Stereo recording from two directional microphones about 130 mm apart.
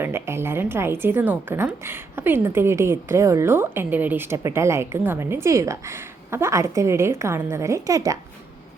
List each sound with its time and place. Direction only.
0.0 s a woman's voice: 20° right (ahead or behind)